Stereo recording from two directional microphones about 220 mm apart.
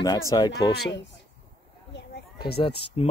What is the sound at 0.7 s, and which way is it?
Speech, 55° left (ahead or behind).